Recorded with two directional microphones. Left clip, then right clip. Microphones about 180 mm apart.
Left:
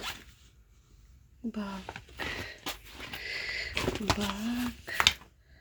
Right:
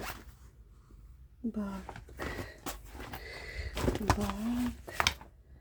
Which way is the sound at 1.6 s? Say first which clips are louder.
Left 3 dB; 5° left (ahead or behind).